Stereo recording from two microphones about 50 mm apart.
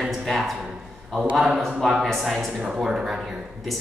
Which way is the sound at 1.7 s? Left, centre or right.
Centre.